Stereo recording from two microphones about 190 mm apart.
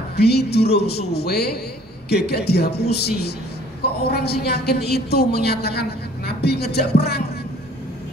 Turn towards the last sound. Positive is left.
turn(degrees=55)  # may be behind; listen again after turning